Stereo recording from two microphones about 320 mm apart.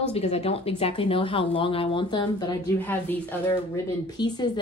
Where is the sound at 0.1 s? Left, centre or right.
Centre.